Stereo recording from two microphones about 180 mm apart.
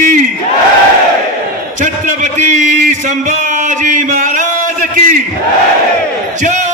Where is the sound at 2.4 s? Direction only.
45° right (ahead or behind).